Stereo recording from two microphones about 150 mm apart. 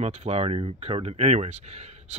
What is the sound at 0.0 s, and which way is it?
Speech, 50° right (ahead or behind).